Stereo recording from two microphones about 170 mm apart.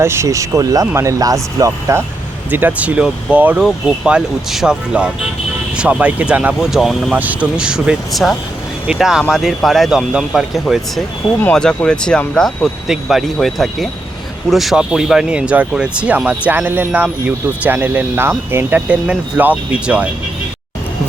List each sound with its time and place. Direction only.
0.0 s speech: 15° right (ahead or behind)